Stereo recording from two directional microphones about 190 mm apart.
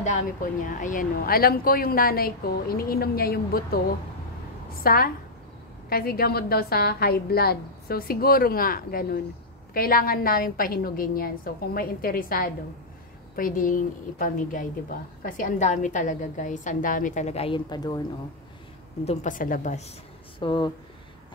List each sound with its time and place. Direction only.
0.0 s a woman's voice: 45° left (ahead or behind)
4.8 s a woman's voice: 50° left (ahead or behind); by 18.0 s 20° left (ahead or behind)
19.0 s a woman's voice: 45° left (ahead or behind)
20.3 s speech: 25° left (ahead or behind)